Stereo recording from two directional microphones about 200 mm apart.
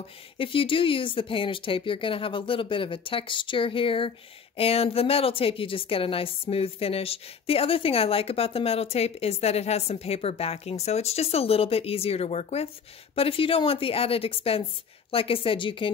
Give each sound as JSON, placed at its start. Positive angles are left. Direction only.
{"t": 0.4, "sound": "a woman's voice", "side_deg": 25}